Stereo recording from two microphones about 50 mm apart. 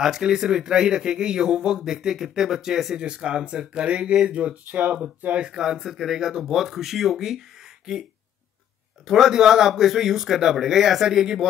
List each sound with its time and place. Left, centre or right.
0.0 s speech: centre
9.0 s speech: centre